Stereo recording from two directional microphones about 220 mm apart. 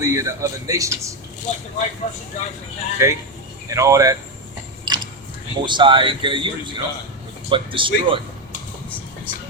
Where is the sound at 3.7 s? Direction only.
15° right (ahead or behind).